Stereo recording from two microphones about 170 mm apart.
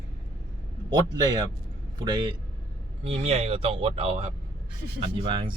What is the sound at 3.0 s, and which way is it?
Speech, 35° right (ahead or behind).